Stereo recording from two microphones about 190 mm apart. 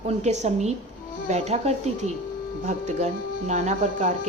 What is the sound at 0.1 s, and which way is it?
Speech, 35° right (ahead or behind).